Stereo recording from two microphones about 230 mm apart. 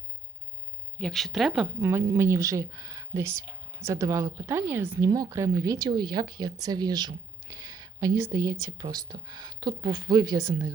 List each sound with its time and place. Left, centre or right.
0.9 s speech: centre